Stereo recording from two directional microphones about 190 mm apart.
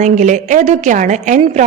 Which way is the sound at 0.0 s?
40° right (ahead or behind).